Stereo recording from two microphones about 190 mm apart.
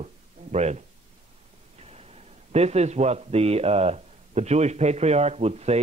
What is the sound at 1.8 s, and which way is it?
A man's voice, 35° right (ahead or behind).